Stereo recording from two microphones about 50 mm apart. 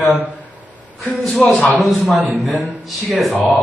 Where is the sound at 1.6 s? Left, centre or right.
Centre.